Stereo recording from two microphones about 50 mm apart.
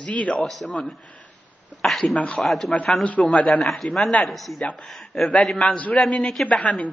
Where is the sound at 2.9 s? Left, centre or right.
Left; by 5.6 s centre.